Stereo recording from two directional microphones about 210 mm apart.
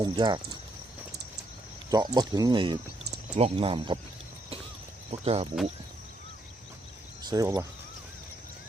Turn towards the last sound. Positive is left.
turn(degrees=-15)  # may be behind; listen again after turning